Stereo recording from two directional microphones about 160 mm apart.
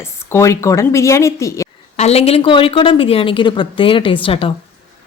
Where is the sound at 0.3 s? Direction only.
20° left (ahead or behind).